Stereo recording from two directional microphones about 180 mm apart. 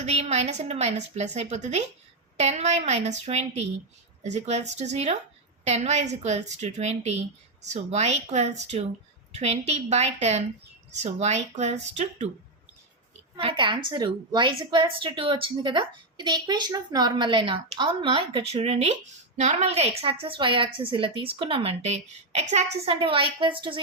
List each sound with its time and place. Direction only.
0.0 s a woman's voice: 40° right (ahead or behind)
13.3 s a woman's voice: 30° right (ahead or behind)